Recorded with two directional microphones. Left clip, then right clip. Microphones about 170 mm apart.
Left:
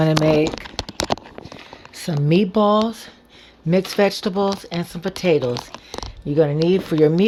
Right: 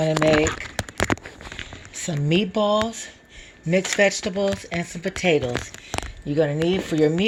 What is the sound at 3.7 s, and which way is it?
Speech, 25° left (ahead or behind).